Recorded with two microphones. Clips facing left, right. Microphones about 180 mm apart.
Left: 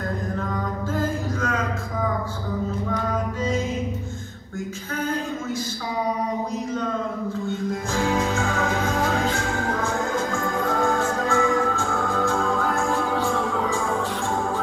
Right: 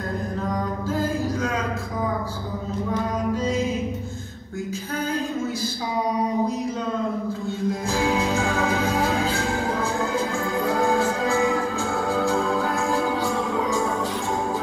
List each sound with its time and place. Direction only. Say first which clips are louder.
8.3 s music: right 1 dB; 35° right (ahead or behind)